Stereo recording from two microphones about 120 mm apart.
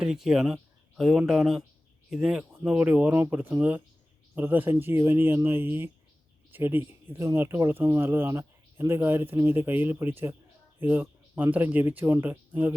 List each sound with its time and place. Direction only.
0.0 s speech: 5° right (ahead or behind)